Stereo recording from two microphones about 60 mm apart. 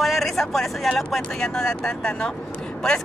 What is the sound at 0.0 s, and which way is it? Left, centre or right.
Speech, centre.